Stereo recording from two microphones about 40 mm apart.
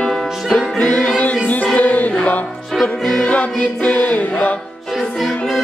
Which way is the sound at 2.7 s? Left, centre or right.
Centre.